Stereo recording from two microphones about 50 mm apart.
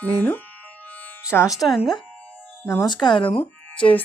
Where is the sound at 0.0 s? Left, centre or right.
Left.